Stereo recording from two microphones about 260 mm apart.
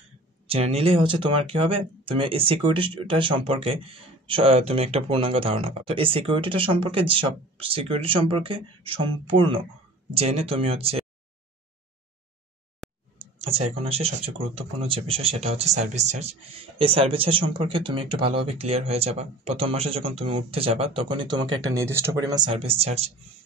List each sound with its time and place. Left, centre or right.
0.5 s speech: right
12.8 s a sound: centre
13.7 s speech: right